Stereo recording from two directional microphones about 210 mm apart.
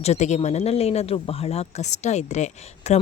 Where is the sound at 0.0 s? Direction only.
30° left (ahead or behind).